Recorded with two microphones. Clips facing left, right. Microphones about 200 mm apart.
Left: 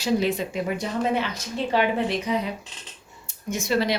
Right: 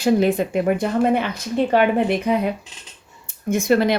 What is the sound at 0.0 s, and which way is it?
A woman's voice, 55° right (ahead or behind).